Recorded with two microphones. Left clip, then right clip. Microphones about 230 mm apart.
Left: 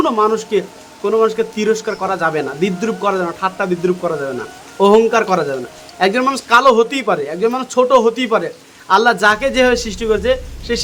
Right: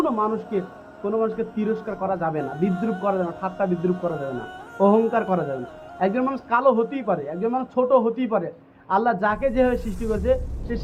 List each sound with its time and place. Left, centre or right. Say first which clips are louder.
0.0 s speech: left 9 dB; centre